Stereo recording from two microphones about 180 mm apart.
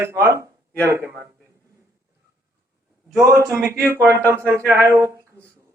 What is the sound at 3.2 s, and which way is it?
A man's voice, 15° right (ahead or behind).